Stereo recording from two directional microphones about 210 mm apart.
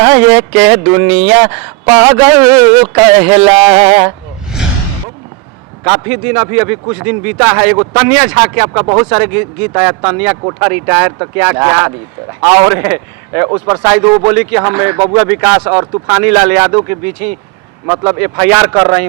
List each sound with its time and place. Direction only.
0.0 s speech: 10° right (ahead or behind)
5.8 s speech: 10° right (ahead or behind)
8.8 s speech: 25° right (ahead or behind)
9.0 s speech: 10° right (ahead or behind)
17.8 s speech: 20° right (ahead or behind)